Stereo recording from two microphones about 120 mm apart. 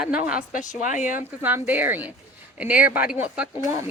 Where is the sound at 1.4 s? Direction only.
15° right (ahead or behind).